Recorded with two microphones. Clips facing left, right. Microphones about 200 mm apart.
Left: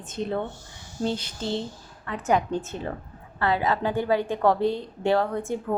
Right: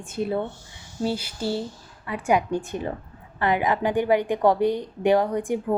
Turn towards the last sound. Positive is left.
turn(degrees=-15)  # may be behind; listen again after turning